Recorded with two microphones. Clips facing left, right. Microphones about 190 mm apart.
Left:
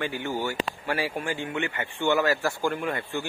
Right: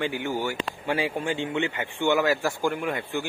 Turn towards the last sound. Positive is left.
turn(degrees=-15)  # may be behind; listen again after turning